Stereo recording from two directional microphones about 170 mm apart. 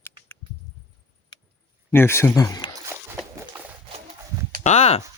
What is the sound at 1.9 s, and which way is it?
Speech, 15° left (ahead or behind).